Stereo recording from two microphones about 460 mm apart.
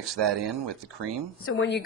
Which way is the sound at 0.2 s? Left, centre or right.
Right.